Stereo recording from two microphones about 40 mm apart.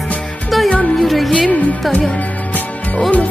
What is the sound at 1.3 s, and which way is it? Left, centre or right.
Music, left.